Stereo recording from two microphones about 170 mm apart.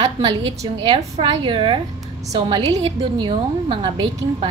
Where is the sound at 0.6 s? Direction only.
30° right (ahead or behind).